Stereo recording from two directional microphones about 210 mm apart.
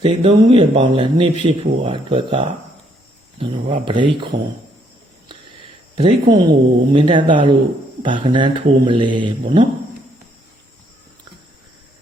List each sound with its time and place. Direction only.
0.0 s a man's voice: 25° right (ahead or behind)
5.3 s a man's voice: 25° right (ahead or behind)